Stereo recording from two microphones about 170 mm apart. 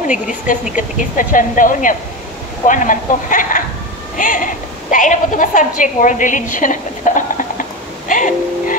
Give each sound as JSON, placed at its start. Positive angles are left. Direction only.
{"t": 0.5, "sound": "a woman's voice", "side_deg": 50}
{"t": 8.1, "sound": "music", "side_deg": 50}